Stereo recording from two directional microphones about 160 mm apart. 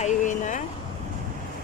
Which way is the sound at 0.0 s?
50° left (ahead or behind).